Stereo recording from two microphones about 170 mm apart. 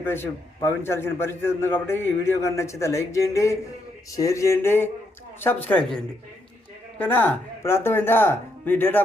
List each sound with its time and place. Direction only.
0.0 s a man's voice: 15° left (ahead or behind)